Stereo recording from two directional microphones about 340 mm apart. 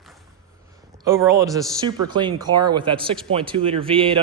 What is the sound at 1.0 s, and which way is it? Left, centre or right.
A man's voice, centre.